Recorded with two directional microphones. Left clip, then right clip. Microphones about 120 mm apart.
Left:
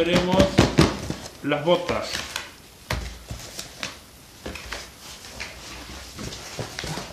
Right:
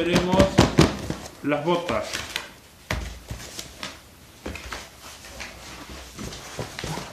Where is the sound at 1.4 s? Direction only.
20° left (ahead or behind).